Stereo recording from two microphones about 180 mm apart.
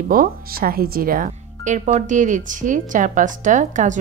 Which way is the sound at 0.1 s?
55° right (ahead or behind).